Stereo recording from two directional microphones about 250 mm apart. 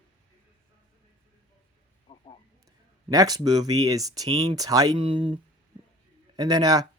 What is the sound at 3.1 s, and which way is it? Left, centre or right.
Speech, centre.